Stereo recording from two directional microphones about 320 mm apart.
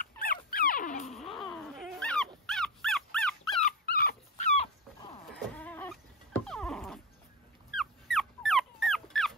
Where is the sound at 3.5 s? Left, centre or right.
Left.